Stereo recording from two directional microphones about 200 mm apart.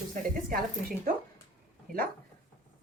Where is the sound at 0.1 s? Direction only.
45° right (ahead or behind).